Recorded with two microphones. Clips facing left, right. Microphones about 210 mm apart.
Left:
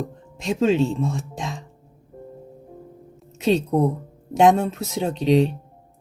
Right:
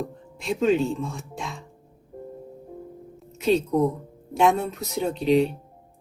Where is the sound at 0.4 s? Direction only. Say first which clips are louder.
Left 2 dB; 85° left.